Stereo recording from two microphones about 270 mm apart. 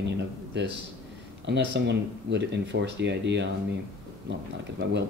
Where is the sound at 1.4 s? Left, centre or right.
Right.